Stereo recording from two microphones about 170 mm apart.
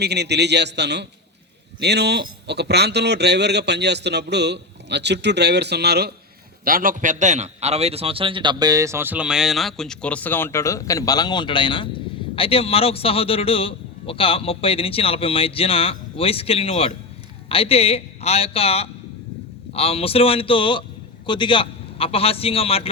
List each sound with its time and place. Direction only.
0.0 s a man's voice: 75° right (ahead or behind)
6.7 s a man's voice: 55° right (ahead or behind); by 22.9 s 35° left (ahead or behind)